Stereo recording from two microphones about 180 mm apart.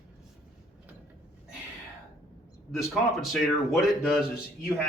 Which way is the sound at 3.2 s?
Centre (ahead or behind).